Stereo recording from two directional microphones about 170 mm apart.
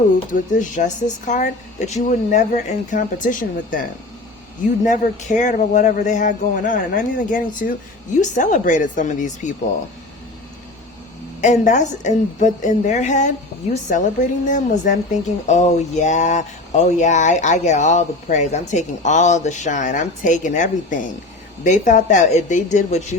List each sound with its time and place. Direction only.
0.3 s speech: 50° left (ahead or behind)
4.9 s speech: 45° left (ahead or behind)
11.3 s speech: 45° left (ahead or behind)